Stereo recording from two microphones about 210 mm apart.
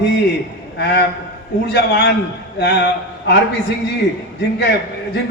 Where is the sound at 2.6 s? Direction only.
50° left (ahead or behind).